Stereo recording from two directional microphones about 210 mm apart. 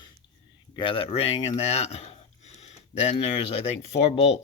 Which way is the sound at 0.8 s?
25° left (ahead or behind).